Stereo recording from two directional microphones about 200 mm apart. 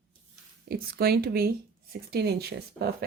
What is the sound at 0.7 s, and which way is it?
Speech, 50° right (ahead or behind).